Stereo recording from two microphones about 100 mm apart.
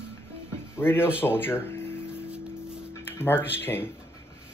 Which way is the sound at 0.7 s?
20° left (ahead or behind).